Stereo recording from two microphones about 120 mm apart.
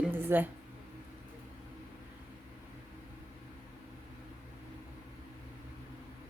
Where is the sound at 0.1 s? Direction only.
15° right (ahead or behind).